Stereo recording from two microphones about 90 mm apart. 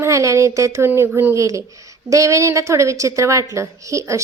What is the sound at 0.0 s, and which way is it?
A woman's voice, 35° right (ahead or behind).